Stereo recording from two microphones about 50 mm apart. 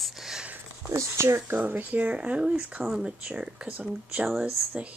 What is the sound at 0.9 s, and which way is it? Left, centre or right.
Speech, right.